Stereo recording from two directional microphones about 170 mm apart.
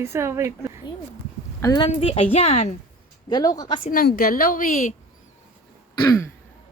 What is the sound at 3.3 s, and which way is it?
Speech, 25° left (ahead or behind).